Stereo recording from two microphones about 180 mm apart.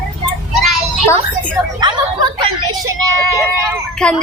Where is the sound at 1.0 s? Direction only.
15° left (ahead or behind).